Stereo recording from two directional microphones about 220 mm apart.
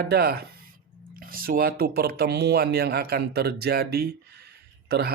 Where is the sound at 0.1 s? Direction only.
45° right (ahead or behind).